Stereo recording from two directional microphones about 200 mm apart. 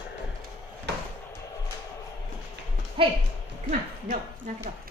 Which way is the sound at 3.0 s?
25° right (ahead or behind).